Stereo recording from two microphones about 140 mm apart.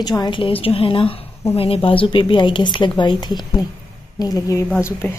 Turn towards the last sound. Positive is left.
turn(degrees=15)  # may be behind; listen again after turning